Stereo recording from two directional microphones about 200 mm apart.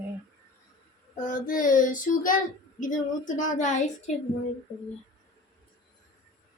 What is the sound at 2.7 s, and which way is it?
A woman's voice, 40° left (ahead or behind).